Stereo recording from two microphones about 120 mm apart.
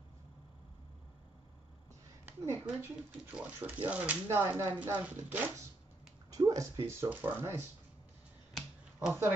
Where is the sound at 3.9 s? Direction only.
15° right (ahead or behind).